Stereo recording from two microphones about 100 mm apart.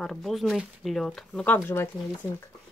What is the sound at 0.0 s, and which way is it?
Speech, centre (ahead or behind).